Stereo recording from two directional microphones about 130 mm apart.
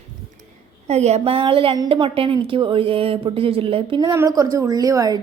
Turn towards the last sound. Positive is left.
turn(degrees=-30)  # may be behind; listen again after turning